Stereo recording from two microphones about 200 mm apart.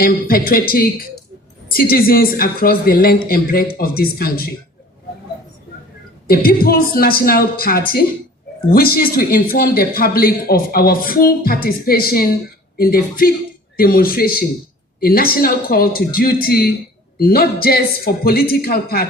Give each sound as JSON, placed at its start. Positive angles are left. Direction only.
{"t": 0.0, "sound": "a man's voice", "side_deg": 45}
{"t": 6.2, "sound": "a man's voice", "side_deg": 50}